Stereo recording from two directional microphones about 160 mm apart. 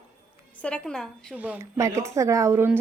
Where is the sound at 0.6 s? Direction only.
5° left (ahead or behind).